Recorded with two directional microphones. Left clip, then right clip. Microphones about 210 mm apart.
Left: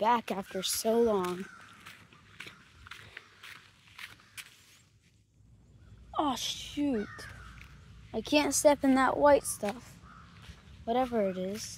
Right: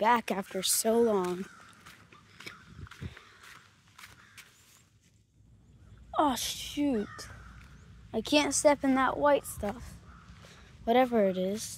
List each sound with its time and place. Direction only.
0.0 s speech: 10° right (ahead or behind)
1.9 s biting: 5° left (ahead or behind)
2.4 s a sound: 10° left (ahead or behind)
2.9 s walk: 5° left (ahead or behind)
6.1 s a woman's voice: 15° right (ahead or behind)
8.8 s a woman's voice: 5° left (ahead or behind)
9.6 s speech: 15° right (ahead or behind)
10.9 s speech: 30° right (ahead or behind)